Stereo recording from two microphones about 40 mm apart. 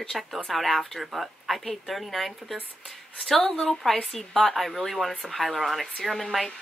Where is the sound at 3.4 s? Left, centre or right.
Centre.